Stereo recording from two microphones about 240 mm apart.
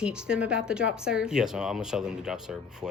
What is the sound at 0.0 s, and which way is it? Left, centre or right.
Speech, centre.